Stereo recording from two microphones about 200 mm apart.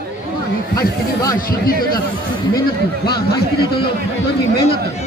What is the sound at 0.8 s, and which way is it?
Speech, 15° left (ahead or behind).